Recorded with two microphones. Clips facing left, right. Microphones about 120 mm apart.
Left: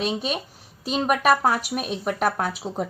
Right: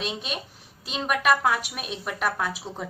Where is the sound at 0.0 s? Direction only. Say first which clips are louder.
Left 6 dB; 40° left (ahead or behind).